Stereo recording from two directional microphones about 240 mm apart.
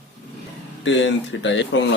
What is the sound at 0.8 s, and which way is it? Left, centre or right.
Speech, left.